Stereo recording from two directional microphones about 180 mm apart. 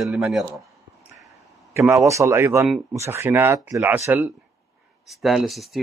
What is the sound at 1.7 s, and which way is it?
Speech, 15° right (ahead or behind).